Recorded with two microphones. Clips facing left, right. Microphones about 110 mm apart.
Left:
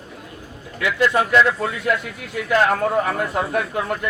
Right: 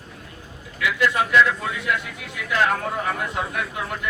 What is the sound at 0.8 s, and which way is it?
Speech, 40° left (ahead or behind).